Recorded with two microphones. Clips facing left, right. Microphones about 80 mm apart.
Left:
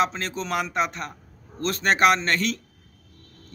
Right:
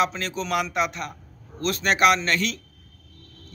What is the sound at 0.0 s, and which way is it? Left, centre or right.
A man's voice, left.